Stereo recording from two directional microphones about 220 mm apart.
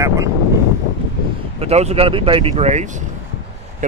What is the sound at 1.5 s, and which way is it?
Speech, 30° right (ahead or behind).